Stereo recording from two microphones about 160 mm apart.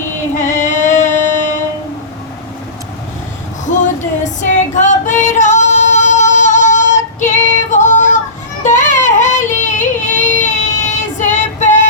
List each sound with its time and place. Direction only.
0.3 s female singing: 50° left (ahead or behind)
3.7 s music: 50° left (ahead or behind)
8.6 s a sound: 50° left (ahead or behind)